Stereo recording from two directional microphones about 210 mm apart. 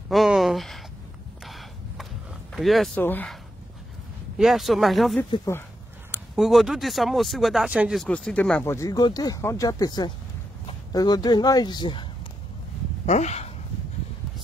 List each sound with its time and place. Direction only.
0.1 s a sound: centre (ahead or behind)
2.5 s speech: centre (ahead or behind)
4.4 s speech: centre (ahead or behind)
5.3 s speech: 15° left (ahead or behind)
6.1 s speech: centre (ahead or behind); by 12.1 s 20° left (ahead or behind)
13.0 s speech: 30° left (ahead or behind)